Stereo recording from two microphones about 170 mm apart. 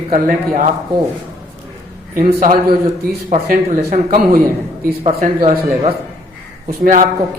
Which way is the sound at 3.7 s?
40° right (ahead or behind).